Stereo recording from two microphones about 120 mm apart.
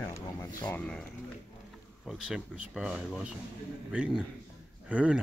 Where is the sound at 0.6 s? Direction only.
10° left (ahead or behind).